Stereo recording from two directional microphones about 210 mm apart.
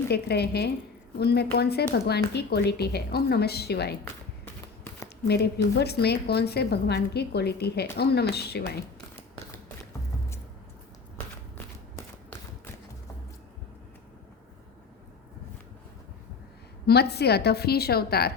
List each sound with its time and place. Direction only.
0.1 s a woman's voice: 50° left (ahead or behind)
5.7 s a woman's voice: 50° left (ahead or behind)
16.8 s a woman's voice: 50° left (ahead or behind)